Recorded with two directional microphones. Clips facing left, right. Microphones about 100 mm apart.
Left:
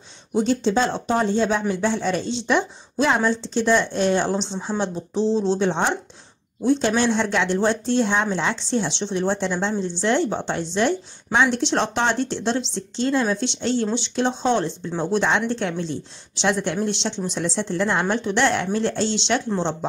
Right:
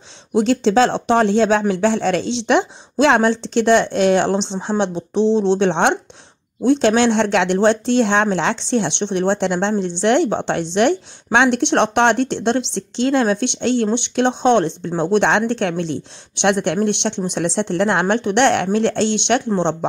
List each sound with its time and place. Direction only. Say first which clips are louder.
0.3 s speech: right 5 dB; 90° right; by 19.4 s 60° right (ahead or behind)